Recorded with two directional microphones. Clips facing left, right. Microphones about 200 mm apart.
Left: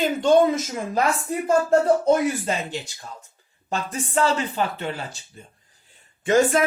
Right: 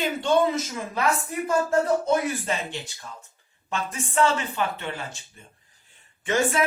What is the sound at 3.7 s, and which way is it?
Speech, 35° left (ahead or behind).